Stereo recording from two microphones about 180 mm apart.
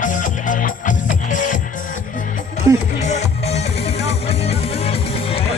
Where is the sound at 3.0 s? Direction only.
40° left (ahead or behind).